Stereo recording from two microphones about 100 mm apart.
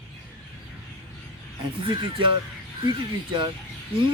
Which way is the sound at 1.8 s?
55° right (ahead or behind).